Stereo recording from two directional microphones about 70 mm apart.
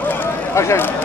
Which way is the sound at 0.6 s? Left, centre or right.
Left.